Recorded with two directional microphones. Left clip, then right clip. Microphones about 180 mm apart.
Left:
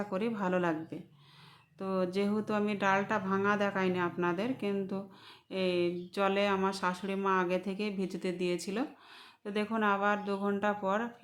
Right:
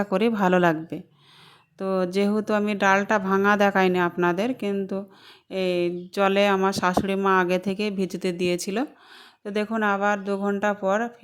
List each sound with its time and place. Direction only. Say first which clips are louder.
0.0 s a woman's voice: right 12 dB; 45° right (ahead or behind)